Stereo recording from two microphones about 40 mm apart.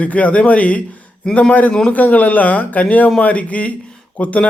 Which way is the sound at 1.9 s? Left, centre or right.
Left.